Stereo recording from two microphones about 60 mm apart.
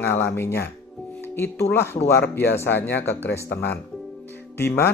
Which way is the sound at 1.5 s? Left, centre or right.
Left.